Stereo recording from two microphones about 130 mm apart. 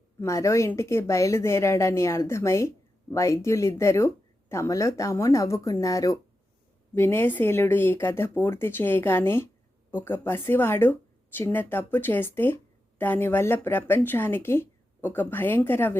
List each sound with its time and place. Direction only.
0.2 s speech: 25° left (ahead or behind)